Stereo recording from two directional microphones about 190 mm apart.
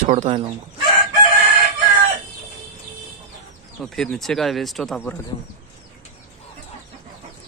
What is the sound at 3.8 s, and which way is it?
Speech, centre (ahead or behind).